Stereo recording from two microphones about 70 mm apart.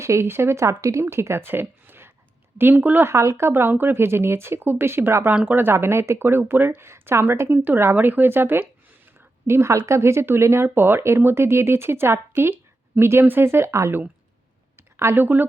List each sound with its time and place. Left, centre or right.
0.0 s speech: right
3.1 s speech: right
14.9 s speech: right